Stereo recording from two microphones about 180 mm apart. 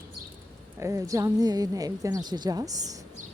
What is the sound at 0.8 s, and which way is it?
A woman's voice, 15° right (ahead or behind).